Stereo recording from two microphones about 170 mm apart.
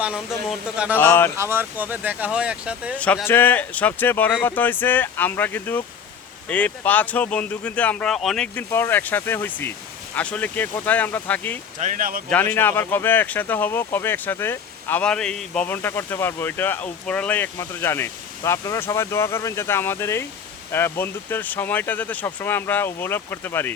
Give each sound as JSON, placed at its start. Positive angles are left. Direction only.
{"t": 0.9, "sound": "speech", "side_deg": 15}
{"t": 1.4, "sound": "speech", "side_deg": -15}
{"t": 3.0, "sound": "speech", "side_deg": 10}
{"t": 11.8, "sound": "speech", "side_deg": -50}
{"t": 12.3, "sound": "speech", "side_deg": 10}